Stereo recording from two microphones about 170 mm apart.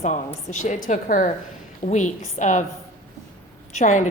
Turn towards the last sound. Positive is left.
turn(degrees=45)  # may be behind; listen again after turning